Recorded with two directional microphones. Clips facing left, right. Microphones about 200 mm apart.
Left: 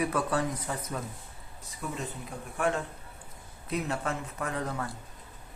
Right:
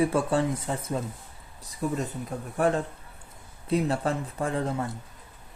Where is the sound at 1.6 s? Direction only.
35° right (ahead or behind).